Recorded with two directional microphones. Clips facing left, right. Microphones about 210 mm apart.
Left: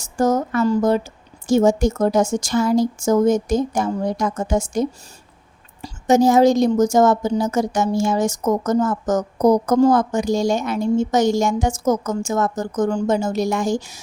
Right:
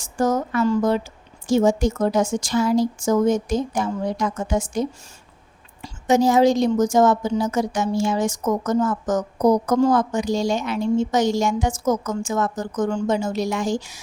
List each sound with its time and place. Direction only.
0.0 s a woman's voice: 40° left (ahead or behind)